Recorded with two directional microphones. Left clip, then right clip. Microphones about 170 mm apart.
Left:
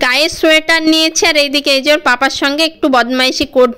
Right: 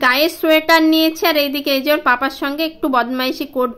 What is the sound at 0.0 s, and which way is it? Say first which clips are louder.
A woman's voice: left 3 dB; 25° left (ahead or behind).